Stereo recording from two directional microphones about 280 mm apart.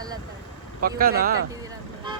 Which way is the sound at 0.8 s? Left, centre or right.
Right.